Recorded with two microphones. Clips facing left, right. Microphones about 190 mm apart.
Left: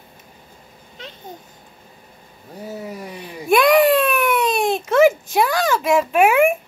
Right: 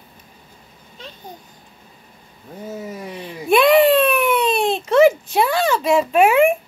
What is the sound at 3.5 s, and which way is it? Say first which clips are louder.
Baby cry: right 1 dB; centre (ahead or behind).